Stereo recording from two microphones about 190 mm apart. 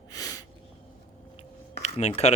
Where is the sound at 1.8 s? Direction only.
35° left (ahead or behind).